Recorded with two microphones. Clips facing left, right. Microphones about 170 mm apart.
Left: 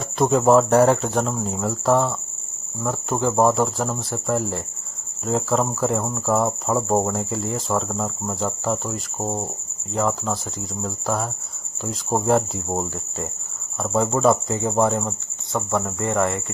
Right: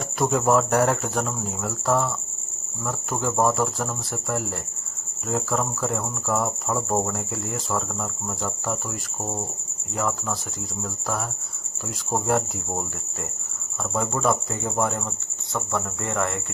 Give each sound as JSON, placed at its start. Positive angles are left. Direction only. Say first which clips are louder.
{"t": 0.3, "sound": "cricket", "louder": "left 5 dB", "side_deg": 25}
{"t": 15.5, "sound": "speech", "louder": "left 4 dB", "side_deg": 20}